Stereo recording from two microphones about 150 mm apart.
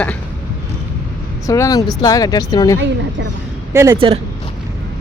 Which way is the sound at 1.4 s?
20° left (ahead or behind).